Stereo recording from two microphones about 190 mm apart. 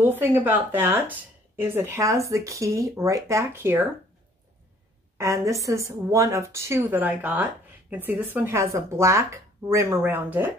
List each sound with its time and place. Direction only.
0.0 s speech: 10° right (ahead or behind)
5.1 s speech: 15° right (ahead or behind)